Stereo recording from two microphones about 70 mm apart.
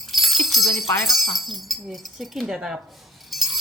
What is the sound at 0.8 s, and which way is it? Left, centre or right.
Jingle bell, left.